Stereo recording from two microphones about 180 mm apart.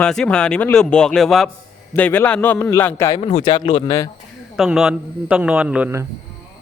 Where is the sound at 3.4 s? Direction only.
25° left (ahead or behind).